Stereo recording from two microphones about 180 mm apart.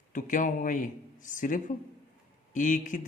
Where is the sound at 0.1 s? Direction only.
45° left (ahead or behind).